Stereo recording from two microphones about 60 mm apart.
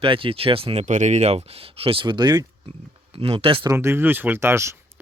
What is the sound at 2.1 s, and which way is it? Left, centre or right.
Speech, right.